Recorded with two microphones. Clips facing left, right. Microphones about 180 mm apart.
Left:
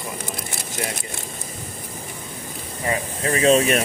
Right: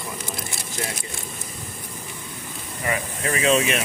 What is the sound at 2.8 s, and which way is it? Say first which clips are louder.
Speech: left 2 dB; 30° left (ahead or behind).